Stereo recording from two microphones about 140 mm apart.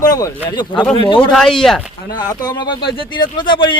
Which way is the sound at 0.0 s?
25° left (ahead or behind).